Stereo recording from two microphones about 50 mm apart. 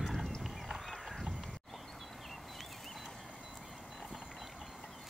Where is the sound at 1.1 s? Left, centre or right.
Centre.